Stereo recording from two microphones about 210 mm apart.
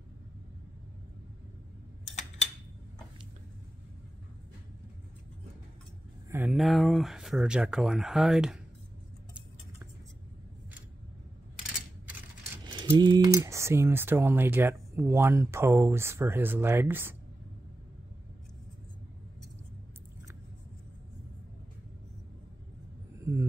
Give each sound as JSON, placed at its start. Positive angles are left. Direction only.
{"t": 2.1, "sound": "a sound", "side_deg": 30}
{"t": 6.3, "sound": "speech", "side_deg": -5}
{"t": 12.9, "sound": "speech", "side_deg": -20}